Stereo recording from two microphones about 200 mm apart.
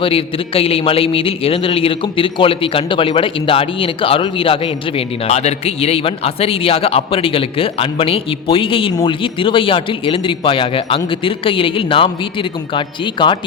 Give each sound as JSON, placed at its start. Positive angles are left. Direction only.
{"t": 0.0, "sound": "a man's voice", "side_deg": 25}